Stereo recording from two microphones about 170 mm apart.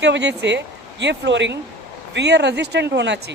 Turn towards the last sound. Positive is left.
turn(degrees=-90)